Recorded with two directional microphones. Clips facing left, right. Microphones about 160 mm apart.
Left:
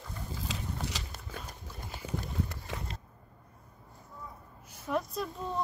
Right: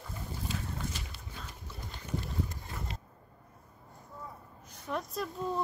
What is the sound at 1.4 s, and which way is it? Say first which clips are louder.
Dog: left 1 dB; 10° left (ahead or behind).